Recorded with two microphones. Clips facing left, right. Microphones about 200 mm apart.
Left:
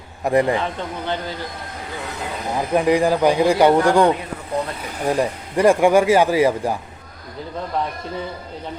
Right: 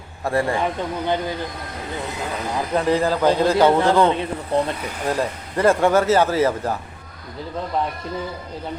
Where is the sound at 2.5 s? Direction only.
15° left (ahead or behind).